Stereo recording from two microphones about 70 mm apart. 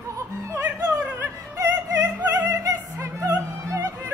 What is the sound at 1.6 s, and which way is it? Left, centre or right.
Music, right.